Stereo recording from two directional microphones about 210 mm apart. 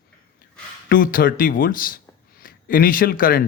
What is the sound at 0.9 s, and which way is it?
A man's voice, 40° left (ahead or behind).